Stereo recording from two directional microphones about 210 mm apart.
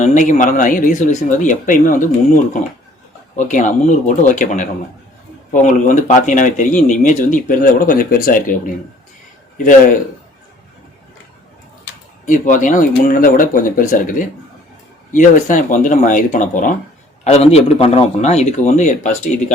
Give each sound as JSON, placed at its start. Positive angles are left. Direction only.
{"t": 0.0, "sound": "speech", "side_deg": 35}
{"t": 12.2, "sound": "speech", "side_deg": 40}